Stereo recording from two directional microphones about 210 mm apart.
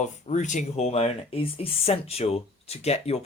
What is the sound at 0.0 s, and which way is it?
Speech, 35° left (ahead or behind).